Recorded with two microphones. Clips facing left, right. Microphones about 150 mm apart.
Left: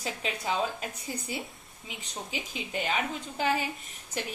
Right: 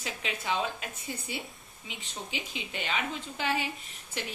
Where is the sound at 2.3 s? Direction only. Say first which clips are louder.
Left 4 dB; 45° left (ahead or behind).